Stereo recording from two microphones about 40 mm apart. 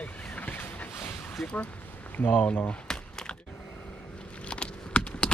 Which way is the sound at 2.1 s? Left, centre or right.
Left.